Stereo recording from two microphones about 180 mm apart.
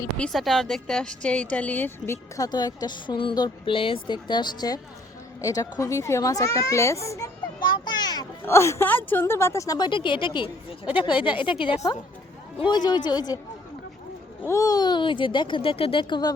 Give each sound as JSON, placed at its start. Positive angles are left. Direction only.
{"t": 0.2, "sound": "a child's voice", "side_deg": 0}
{"t": 12.5, "sound": "speech", "side_deg": 25}
{"t": 14.4, "sound": "speech", "side_deg": 15}